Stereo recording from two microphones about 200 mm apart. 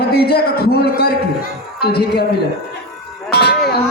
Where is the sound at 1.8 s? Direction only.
55° left (ahead or behind).